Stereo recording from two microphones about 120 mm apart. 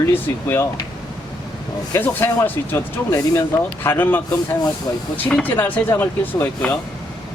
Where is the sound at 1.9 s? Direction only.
20° left (ahead or behind).